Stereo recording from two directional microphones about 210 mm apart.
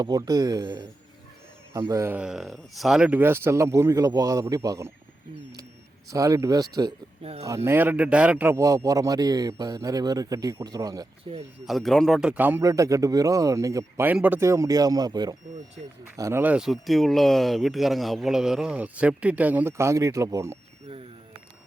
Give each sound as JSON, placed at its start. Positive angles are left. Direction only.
{"t": 0.0, "sound": "a man's voice", "side_deg": -20}
{"t": 6.1, "sound": "a man's voice", "side_deg": -15}
{"t": 7.2, "sound": "speech", "side_deg": -30}
{"t": 7.4, "sound": "a man's voice", "side_deg": -15}
{"t": 11.6, "sound": "a man's voice", "side_deg": 0}